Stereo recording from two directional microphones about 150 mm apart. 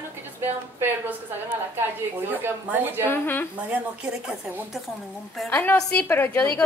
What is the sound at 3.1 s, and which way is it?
Speech, 15° left (ahead or behind).